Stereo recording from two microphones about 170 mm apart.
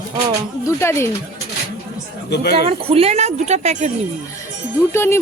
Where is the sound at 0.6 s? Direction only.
15° left (ahead or behind).